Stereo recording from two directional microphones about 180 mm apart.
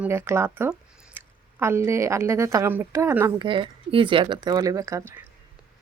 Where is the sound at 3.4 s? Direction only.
25° right (ahead or behind).